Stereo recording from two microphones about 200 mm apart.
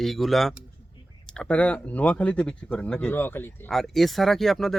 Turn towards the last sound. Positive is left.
turn(degrees=0)  # may be behind; listen again after turning